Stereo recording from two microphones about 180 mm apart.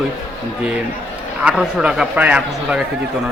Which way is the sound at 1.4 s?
Centre (ahead or behind).